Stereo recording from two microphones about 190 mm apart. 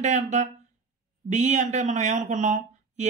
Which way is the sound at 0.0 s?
40° right (ahead or behind).